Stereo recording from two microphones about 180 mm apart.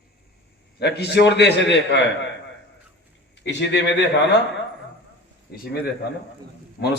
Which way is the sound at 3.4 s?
75° left (ahead or behind).